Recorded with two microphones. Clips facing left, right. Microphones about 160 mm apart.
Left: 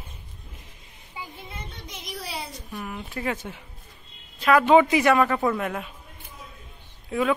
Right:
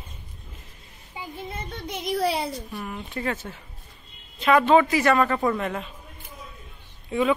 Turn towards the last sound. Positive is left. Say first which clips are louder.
# right 1 dB
turn(degrees=0)  # may be behind; listen again after turning